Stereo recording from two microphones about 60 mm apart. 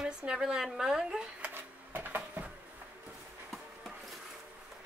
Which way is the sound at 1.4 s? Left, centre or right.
Right.